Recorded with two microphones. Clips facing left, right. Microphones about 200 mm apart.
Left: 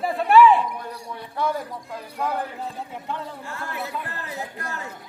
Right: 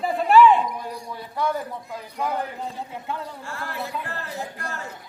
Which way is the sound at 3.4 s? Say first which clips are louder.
Even; 20° left (ahead or behind).